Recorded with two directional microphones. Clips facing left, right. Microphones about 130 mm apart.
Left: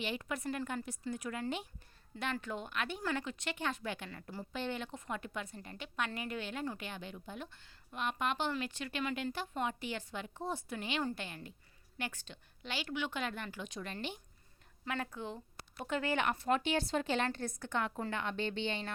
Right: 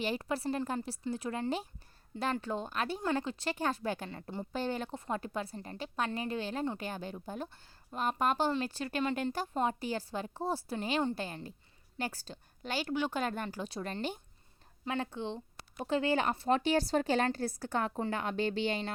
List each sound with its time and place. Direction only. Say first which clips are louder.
0.0 s a woman's voice: right 5 dB; 35° right (ahead or behind)
4.5 s a woman's voice: right 4 dB; 40° right (ahead or behind)
14.8 s a woman's voice: right 4 dB; 25° right (ahead or behind)